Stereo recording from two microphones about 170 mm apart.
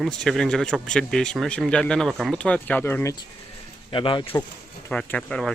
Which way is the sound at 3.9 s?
30° left (ahead or behind).